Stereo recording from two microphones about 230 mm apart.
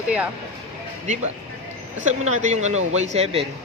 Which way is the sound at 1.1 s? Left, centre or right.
Right.